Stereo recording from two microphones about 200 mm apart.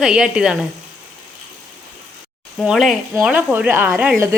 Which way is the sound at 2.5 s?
Centre (ahead or behind).